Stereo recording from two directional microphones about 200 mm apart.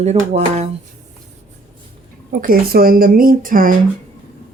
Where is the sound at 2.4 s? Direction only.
45° right (ahead or behind).